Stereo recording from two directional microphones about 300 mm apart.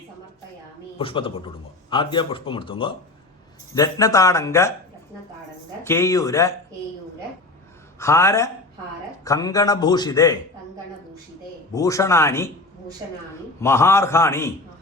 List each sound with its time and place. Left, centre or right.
0.9 s a man's voice: centre
5.8 s a man's voice: centre
7.9 s a man's voice: centre
11.7 s a man's voice: centre
13.6 s a man's voice: centre